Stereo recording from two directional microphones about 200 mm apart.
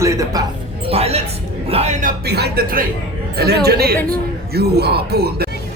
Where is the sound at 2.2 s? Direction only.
55° right (ahead or behind).